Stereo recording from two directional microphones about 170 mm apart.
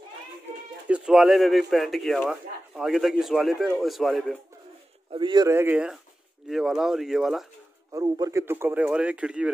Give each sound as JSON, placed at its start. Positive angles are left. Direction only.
{"t": 0.8, "sound": "speech", "side_deg": -5}
{"t": 5.1, "sound": "speech", "side_deg": -25}
{"t": 5.5, "sound": "speech", "side_deg": -10}
{"t": 7.9, "sound": "speech", "side_deg": -20}